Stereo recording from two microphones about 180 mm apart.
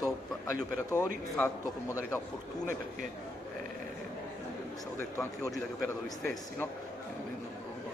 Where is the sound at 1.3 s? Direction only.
10° left (ahead or behind).